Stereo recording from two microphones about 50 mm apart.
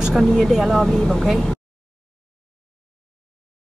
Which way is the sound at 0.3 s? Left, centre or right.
Centre.